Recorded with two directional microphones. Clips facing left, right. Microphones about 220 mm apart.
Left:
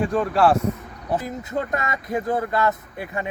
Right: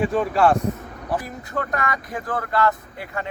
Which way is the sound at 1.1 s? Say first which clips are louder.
Left 2 dB; 20° left (ahead or behind).